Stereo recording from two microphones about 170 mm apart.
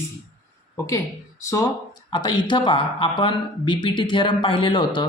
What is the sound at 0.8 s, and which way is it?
Speech, 20° left (ahead or behind).